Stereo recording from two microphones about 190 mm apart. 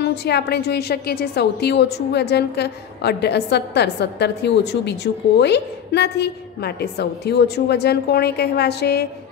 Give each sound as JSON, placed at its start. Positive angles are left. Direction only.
{"t": 0.0, "sound": "a woman's voice", "side_deg": 60}